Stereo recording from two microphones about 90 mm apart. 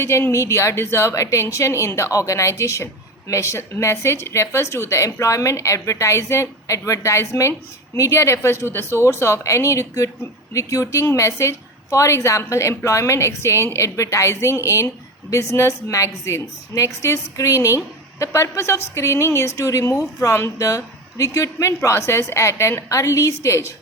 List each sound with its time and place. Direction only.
0.0 s a woman's voice: 30° left (ahead or behind)